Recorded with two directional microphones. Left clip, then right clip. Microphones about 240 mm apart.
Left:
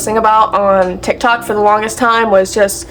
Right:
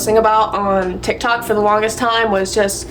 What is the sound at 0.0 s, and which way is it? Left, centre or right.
A woman's voice, centre.